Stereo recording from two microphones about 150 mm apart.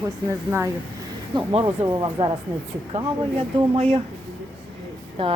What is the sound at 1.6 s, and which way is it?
Speech, 30° right (ahead or behind).